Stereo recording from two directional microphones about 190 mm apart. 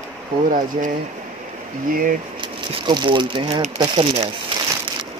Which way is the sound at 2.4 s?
25° right (ahead or behind).